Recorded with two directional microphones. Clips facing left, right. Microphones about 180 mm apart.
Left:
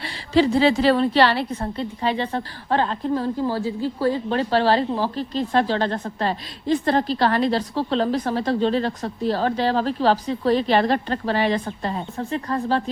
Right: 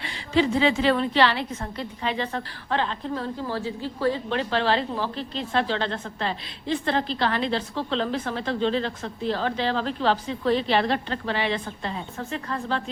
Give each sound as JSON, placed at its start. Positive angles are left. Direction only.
{"t": 0.0, "sound": "a woman's voice", "side_deg": 35}